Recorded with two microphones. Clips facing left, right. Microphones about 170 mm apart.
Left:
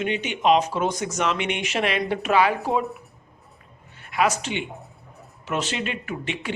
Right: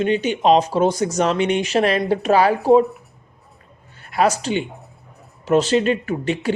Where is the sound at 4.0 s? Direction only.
35° right (ahead or behind).